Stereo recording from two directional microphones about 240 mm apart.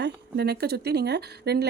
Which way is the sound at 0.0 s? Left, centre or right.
Right.